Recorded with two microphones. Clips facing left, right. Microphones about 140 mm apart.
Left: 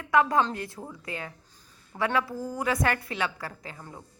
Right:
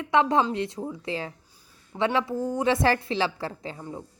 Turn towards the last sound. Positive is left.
turn(degrees=-30)  # may be behind; listen again after turning